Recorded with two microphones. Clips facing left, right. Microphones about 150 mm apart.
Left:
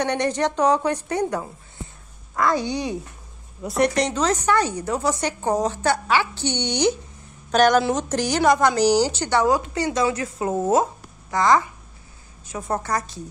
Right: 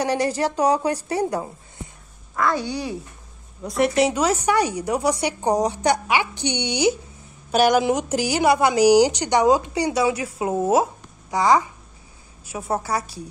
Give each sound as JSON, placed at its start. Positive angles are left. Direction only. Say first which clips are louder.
{"t": 0.0, "sound": "speech", "louder": "right 1 dB", "side_deg": -30}
{"t": 0.5, "sound": "a woman's voice", "louder": "left 1 dB", "side_deg": -10}
{"t": 0.9, "sound": "speech", "louder": "right 1 dB", "side_deg": -35}
{"t": 2.3, "sound": "a child's voice", "louder": "left 1 dB", "side_deg": 15}
{"t": 3.6, "sound": "a woman's voice", "louder": "right 1 dB", "side_deg": 0}